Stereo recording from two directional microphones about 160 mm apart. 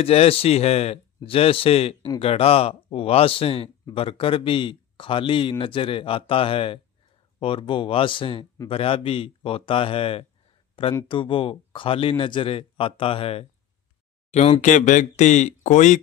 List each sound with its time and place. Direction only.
0.0 s speech: 40° left (ahead or behind)